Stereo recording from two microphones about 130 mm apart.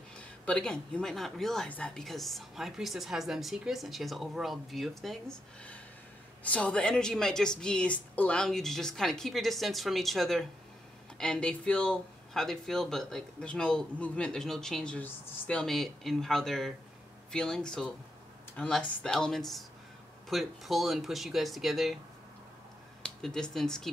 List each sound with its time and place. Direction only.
0.2 s speech: 10° left (ahead or behind)
23.0 s speech: 5° left (ahead or behind)